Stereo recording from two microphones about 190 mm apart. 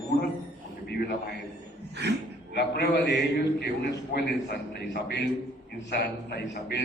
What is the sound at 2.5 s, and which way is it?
A man's voice, 60° left (ahead or behind).